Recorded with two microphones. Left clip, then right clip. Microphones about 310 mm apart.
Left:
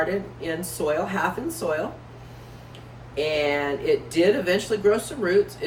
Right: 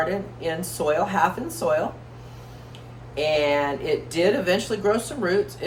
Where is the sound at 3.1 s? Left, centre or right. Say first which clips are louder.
Right 2 dB; centre.